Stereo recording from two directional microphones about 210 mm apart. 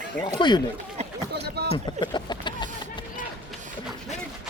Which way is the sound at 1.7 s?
20° left (ahead or behind).